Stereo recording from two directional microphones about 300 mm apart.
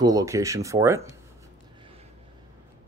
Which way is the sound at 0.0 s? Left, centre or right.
Centre.